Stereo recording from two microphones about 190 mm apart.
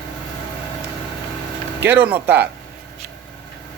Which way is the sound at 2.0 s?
10° right (ahead or behind).